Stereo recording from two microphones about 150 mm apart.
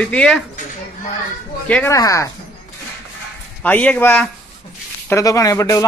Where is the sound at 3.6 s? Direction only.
10° left (ahead or behind).